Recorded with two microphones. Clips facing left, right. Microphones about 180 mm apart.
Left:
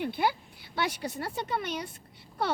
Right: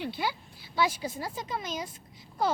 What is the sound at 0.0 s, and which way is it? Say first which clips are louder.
Speech: left 4 dB; 55° left (ahead or behind).